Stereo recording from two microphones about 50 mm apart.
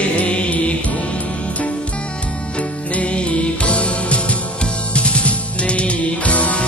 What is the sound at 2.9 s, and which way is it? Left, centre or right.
Music, left.